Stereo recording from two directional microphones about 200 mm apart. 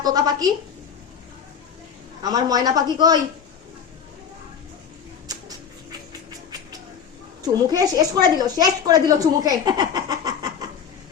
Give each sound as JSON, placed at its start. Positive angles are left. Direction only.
{"t": 0.0, "sound": "a woman's voice", "side_deg": -20}
{"t": 2.2, "sound": "a woman's voice", "side_deg": -20}
{"t": 5.3, "sound": "a sound", "side_deg": -20}
{"t": 7.4, "sound": "a woman's voice", "side_deg": -20}